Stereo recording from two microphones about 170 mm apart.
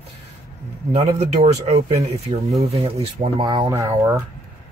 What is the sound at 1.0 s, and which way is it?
Speech, 40° right (ahead or behind).